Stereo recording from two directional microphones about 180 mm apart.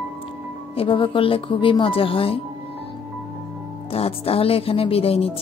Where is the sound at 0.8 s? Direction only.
30° left (ahead or behind).